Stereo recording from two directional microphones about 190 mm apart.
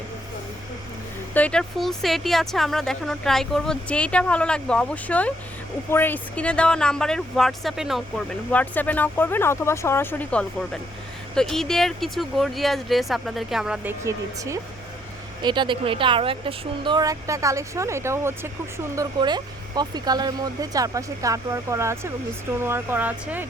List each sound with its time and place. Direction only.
1.3 s speech: 5° left (ahead or behind)
14.0 s speech: 15° right (ahead or behind)